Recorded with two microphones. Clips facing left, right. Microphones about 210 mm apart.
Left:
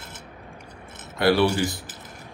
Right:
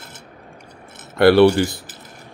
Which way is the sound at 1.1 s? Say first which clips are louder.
Right 8 dB; 65° right (ahead or behind).